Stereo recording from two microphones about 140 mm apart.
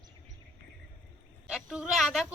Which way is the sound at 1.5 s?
5° right (ahead or behind).